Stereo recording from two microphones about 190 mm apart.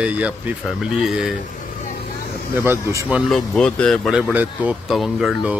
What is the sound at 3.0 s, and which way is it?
Speech, centre (ahead or behind).